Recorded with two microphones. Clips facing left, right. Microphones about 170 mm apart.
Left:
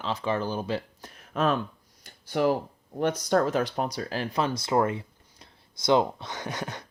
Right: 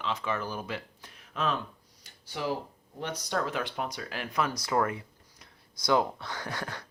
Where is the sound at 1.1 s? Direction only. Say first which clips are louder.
Left 6 dB; 45° left (ahead or behind).